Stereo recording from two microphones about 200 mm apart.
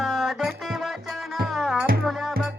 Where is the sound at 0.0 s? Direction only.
Centre (ahead or behind).